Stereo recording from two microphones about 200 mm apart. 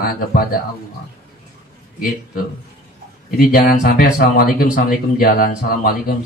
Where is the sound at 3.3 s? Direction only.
45° left (ahead or behind).